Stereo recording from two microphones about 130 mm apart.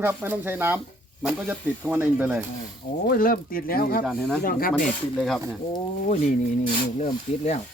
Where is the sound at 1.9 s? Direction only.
15° right (ahead or behind).